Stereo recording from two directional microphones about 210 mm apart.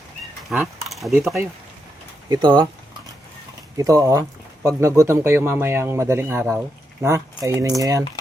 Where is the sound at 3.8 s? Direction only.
15° right (ahead or behind).